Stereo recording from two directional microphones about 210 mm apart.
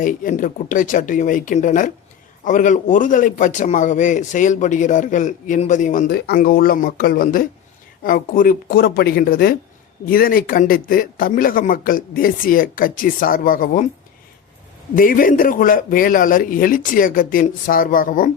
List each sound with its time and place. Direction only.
0.0 s a man's voice: 40° left (ahead or behind)
14.9 s a man's voice: 40° left (ahead or behind)